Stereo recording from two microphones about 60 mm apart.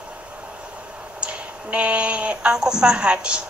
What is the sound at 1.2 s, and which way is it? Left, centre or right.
A woman's voice, centre.